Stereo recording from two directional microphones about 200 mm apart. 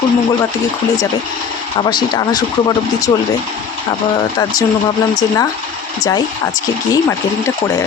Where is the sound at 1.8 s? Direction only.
20° left (ahead or behind).